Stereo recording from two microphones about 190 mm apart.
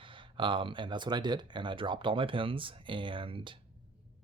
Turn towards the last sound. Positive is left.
turn(degrees=-25)  # may be behind; listen again after turning